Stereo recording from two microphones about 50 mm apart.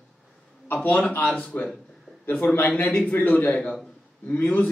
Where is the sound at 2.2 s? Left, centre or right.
Left.